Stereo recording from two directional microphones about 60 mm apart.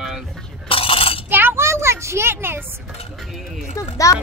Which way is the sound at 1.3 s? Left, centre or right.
Right.